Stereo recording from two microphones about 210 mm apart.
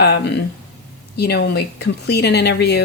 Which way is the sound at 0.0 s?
50° left (ahead or behind).